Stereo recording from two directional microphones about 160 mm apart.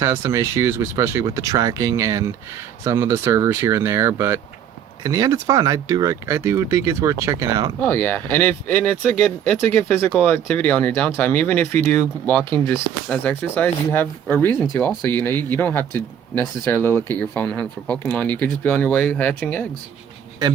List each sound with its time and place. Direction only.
0.0 s speech: 20° right (ahead or behind)
7.8 s speech: 10° left (ahead or behind)